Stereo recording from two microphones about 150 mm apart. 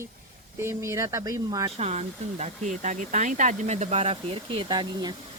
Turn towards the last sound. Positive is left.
turn(degrees=-30)  # may be behind; listen again after turning